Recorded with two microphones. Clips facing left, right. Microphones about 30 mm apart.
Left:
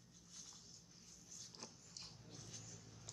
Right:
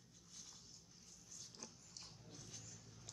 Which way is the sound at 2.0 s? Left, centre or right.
Centre.